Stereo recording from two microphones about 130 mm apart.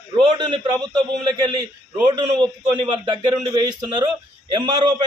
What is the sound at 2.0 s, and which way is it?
A man's voice, 35° right (ahead or behind).